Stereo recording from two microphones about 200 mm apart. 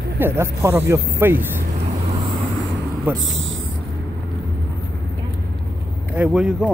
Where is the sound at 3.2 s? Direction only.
70° right (ahead or behind).